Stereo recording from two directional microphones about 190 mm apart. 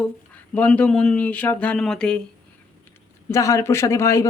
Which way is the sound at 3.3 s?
15° left (ahead or behind).